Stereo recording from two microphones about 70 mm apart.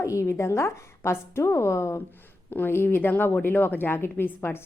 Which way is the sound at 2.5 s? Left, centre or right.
Left.